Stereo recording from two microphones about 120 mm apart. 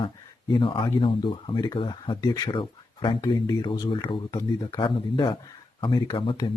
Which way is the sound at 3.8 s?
45° left (ahead or behind).